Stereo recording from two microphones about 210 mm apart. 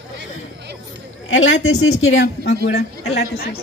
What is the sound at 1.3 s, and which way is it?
Speech, 65° left (ahead or behind).